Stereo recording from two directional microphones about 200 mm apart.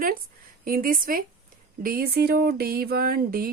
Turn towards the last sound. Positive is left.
turn(degrees=-50)  # may be behind; listen again after turning